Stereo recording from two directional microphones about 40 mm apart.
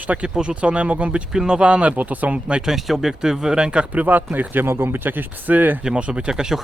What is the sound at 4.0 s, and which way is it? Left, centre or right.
Speech, right.